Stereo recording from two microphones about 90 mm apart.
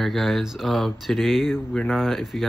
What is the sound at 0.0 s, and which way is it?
Speech, centre (ahead or behind).